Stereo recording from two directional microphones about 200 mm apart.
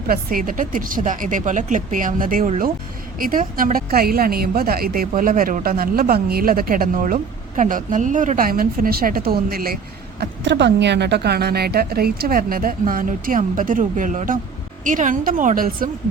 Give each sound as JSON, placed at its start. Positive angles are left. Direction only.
{"t": 0.1, "sound": "a woman's voice", "side_deg": -45}
{"t": 10.2, "sound": "a woman's voice", "side_deg": -60}